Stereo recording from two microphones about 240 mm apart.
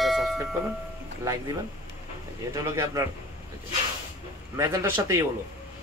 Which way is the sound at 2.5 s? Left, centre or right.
Centre.